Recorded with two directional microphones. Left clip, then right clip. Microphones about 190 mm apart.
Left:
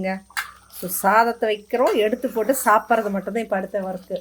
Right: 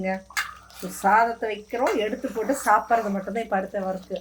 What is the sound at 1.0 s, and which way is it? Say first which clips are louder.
Speech: left 3 dB; 50° left (ahead or behind).